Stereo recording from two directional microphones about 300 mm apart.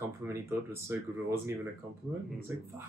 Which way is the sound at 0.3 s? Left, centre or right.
Centre.